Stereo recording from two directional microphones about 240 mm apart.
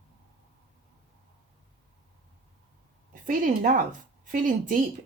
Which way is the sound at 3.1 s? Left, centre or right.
Right.